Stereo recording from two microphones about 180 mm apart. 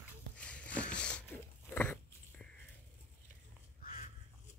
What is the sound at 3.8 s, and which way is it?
Crow, 50° left (ahead or behind).